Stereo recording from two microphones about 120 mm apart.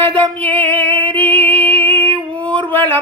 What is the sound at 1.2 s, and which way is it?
Music, 15° left (ahead or behind).